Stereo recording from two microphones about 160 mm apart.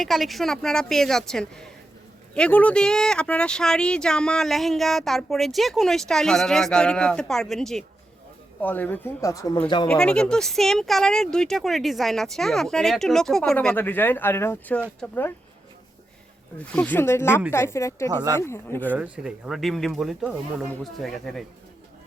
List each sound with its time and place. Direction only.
0.0 s speech: centre (ahead or behind); by 9.9 s 30° left (ahead or behind)
9.9 s speech: 5° left (ahead or behind)
16.7 s speech: 10° left (ahead or behind)
18.1 s speech: 25° right (ahead or behind)
18.3 s speech: 15° left (ahead or behind)
18.9 s speech: 10° right (ahead or behind)